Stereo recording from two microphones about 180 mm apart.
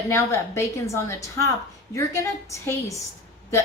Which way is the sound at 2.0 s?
15° left (ahead or behind).